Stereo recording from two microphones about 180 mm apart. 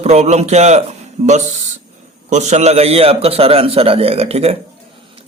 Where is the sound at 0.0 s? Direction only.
40° right (ahead or behind).